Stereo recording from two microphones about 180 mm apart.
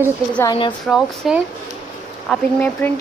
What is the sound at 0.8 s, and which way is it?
Speech, centre (ahead or behind).